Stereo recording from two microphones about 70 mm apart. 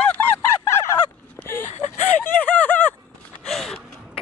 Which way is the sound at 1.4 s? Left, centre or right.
Left.